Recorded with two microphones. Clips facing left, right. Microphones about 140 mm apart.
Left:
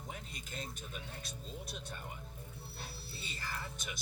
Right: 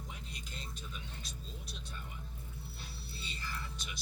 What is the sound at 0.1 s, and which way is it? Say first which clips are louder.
Speech: left 2 dB; 50° left (ahead or behind).